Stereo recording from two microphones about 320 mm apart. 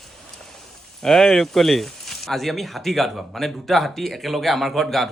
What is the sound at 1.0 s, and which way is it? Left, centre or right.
Speech, centre.